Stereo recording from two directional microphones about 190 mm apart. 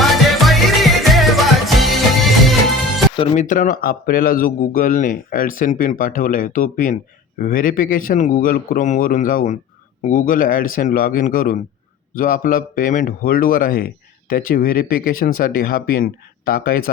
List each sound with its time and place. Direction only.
0.0 s music: centre (ahead or behind)
3.2 s speech: 30° left (ahead or behind)
3.4 s speech: 45° left (ahead or behind)